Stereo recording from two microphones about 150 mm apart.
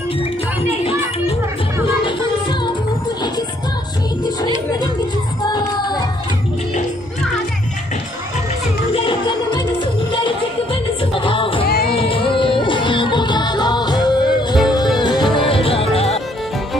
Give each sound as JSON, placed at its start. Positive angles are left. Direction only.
{"t": 5.5, "sound": "music", "side_deg": 25}
{"t": 8.9, "sound": "music", "side_deg": 35}
{"t": 11.6, "sound": "music", "side_deg": 90}
{"t": 11.9, "sound": "music", "side_deg": 35}